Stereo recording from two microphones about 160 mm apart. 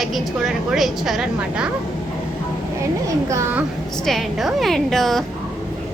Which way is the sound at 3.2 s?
20° right (ahead or behind).